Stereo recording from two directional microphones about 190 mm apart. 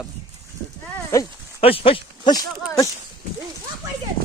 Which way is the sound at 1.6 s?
30° left (ahead or behind).